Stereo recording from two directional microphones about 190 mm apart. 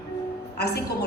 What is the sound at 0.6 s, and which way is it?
Speech, 60° left (ahead or behind).